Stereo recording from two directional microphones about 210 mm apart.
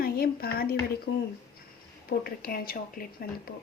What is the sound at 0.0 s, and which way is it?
Speech, 45° left (ahead or behind).